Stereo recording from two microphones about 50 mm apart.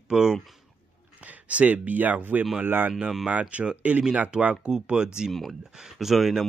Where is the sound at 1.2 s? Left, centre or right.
Right.